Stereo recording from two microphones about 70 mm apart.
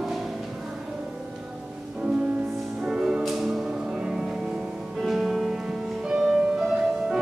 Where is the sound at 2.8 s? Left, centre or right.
Centre.